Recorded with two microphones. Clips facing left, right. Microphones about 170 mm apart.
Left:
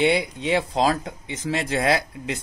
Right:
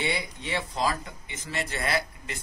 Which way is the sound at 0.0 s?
85° left.